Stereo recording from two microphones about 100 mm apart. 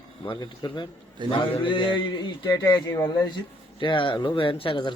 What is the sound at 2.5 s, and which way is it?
Speech, 40° left (ahead or behind).